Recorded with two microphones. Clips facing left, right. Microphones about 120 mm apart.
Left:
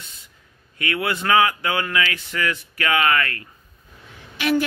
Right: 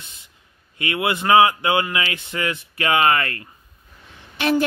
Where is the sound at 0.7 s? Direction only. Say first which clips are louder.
Right 2 dB; 20° right (ahead or behind).